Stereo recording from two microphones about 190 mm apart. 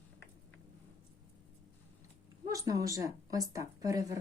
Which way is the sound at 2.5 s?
15° right (ahead or behind).